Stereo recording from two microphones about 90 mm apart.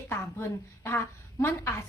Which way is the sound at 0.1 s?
25° left (ahead or behind).